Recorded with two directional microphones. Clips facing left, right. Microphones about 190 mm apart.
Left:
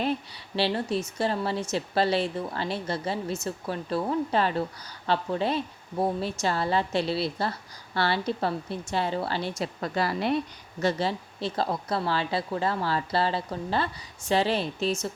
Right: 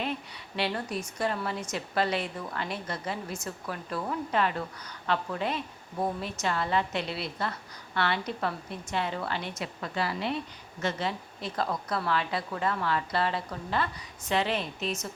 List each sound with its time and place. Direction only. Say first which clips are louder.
0.0 s speech: left 5 dB; 35° left (ahead or behind)